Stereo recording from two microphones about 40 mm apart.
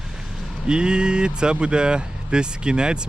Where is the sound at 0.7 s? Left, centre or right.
Right.